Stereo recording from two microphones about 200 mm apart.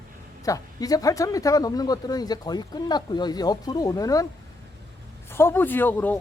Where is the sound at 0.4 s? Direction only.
15° left (ahead or behind).